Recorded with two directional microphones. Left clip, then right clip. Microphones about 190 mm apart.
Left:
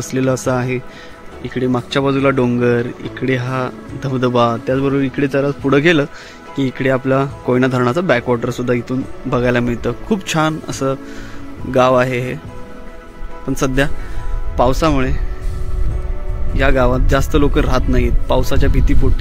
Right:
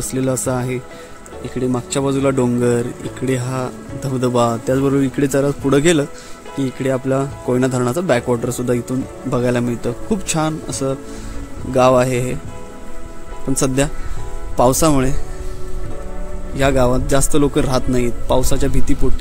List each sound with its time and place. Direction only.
0.0 s speech: 10° right (ahead or behind)
4.7 s a man's voice: 25° right (ahead or behind)
13.5 s a man's voice: 15° right (ahead or behind)
16.5 s speech: 15° right (ahead or behind)